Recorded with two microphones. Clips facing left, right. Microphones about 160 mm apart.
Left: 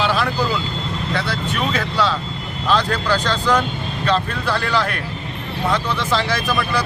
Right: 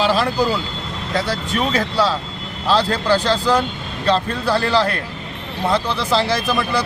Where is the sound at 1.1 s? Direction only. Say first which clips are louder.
Right 4 dB; 40° right (ahead or behind).